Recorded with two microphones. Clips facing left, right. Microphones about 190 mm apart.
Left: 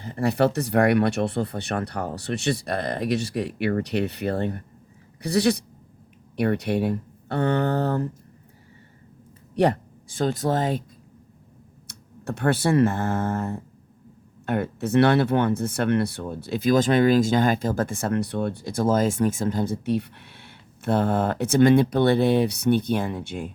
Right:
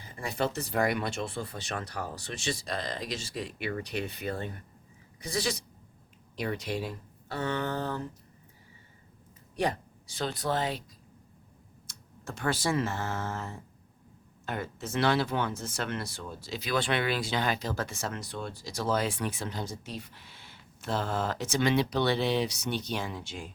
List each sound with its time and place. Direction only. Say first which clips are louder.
0.0 s speech: left 10 dB; 60° left (ahead or behind)
9.6 s speech: left 9 dB; 55° left (ahead or behind)
11.9 s speech: left 10 dB; 60° left (ahead or behind)